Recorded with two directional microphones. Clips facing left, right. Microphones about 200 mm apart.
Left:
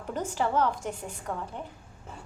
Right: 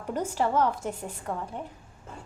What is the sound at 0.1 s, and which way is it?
A woman's voice, 10° right (ahead or behind).